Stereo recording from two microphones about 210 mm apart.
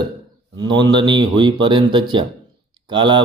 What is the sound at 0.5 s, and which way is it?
Speech, 20° right (ahead or behind).